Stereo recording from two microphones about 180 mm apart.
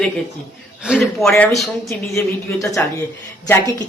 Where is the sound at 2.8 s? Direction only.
10° left (ahead or behind).